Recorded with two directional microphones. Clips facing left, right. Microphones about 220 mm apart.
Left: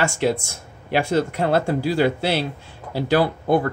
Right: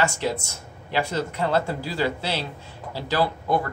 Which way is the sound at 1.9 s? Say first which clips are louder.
Left 4 dB; 55° left (ahead or behind).